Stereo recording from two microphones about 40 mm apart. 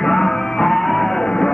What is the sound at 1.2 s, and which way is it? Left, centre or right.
Music, centre.